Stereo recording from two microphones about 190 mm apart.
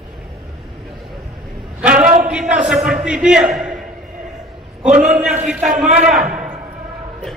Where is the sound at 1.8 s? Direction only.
5° right (ahead or behind).